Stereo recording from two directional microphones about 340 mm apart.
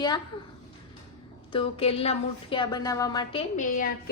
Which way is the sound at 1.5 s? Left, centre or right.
Centre.